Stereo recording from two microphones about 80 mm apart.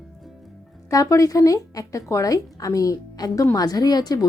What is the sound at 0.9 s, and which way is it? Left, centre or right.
Speech, left.